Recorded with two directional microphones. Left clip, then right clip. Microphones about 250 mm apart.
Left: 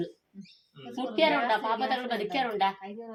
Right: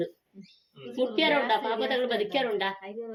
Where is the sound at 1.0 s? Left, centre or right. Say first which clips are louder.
Right 1 dB; left.